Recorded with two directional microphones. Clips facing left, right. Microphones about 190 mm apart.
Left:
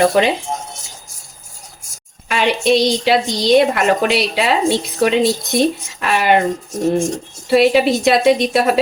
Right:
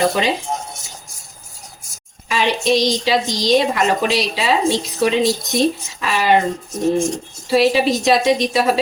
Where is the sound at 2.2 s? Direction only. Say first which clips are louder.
Left 2 dB; 60° left (ahead or behind).